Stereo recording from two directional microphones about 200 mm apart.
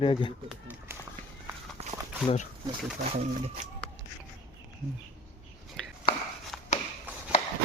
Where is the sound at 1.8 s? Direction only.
30° right (ahead or behind).